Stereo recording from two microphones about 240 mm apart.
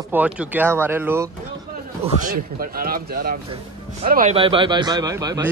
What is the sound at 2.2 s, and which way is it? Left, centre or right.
Speech, right.